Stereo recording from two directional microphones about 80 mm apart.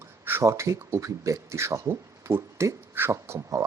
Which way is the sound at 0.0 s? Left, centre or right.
Right.